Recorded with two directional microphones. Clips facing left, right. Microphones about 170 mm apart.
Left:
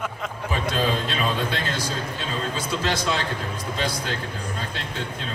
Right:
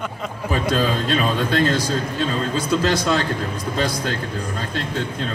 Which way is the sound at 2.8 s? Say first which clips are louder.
Right 3 dB; 40° right (ahead or behind).